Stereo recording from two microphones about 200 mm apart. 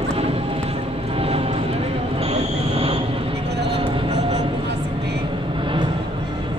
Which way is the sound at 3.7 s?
25° right (ahead or behind).